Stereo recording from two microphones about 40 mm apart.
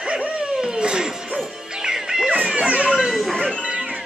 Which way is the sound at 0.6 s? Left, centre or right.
Centre.